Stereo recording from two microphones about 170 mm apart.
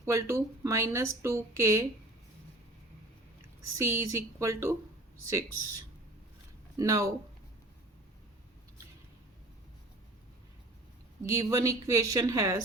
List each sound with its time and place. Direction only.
0.0 s speech: 15° right (ahead or behind)
3.6 s speech: 15° right (ahead or behind)
11.2 s speech: 20° right (ahead or behind)